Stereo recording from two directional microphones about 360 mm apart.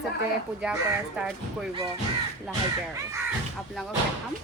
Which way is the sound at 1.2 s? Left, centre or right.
Centre.